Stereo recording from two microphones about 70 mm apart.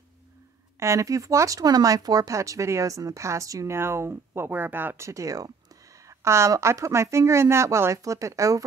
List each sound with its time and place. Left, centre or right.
0.7 s speech: right
3.7 s speech: right
5.0 s speech: right